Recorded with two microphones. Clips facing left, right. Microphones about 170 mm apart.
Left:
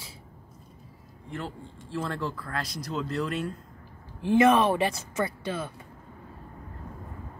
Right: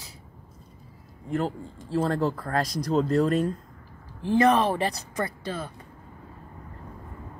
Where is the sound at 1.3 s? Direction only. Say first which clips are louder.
Right 9 dB; 40° right (ahead or behind).